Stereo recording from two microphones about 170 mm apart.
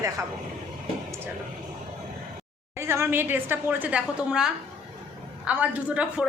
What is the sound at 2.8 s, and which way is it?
A woman's voice, 15° right (ahead or behind).